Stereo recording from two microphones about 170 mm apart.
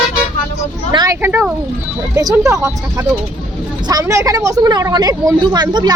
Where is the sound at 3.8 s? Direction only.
20° right (ahead or behind).